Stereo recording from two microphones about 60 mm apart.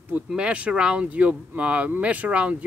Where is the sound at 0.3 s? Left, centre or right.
Centre.